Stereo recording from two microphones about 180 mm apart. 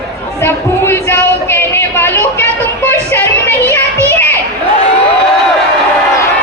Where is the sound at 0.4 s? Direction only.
15° left (ahead or behind).